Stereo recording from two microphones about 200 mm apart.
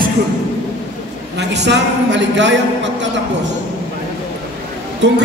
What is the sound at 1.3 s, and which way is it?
A man's voice, 60° right (ahead or behind).